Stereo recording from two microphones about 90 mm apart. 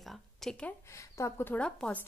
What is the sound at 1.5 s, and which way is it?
Speech, 10° left (ahead or behind).